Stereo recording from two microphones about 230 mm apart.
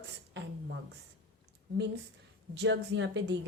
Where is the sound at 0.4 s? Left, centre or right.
Right.